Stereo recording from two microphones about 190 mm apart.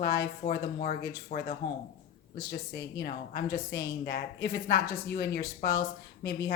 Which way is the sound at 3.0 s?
55° left (ahead or behind).